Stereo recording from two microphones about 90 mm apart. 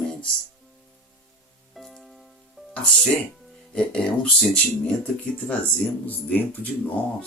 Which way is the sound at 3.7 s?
10° left (ahead or behind).